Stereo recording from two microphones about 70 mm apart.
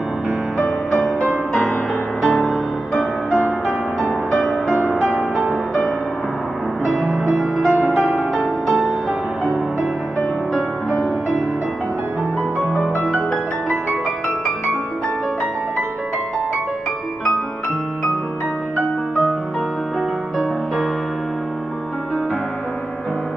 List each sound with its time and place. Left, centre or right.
0.6 s music: left
1.0 s music: centre
6.8 s music: centre
10.5 s music: centre
20.3 s music: centre